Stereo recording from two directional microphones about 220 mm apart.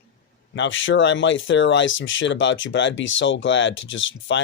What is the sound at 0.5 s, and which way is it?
Speech, 60° left (ahead or behind).